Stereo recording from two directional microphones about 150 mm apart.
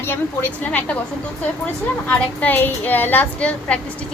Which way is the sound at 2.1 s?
10° left (ahead or behind).